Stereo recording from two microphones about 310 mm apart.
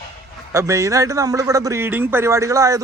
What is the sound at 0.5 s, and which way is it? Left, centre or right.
A man's voice, centre.